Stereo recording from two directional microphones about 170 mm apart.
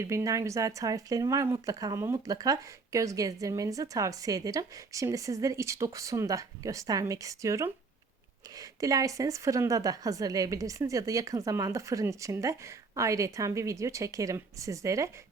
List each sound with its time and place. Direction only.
0.0 s speech: 15° right (ahead or behind)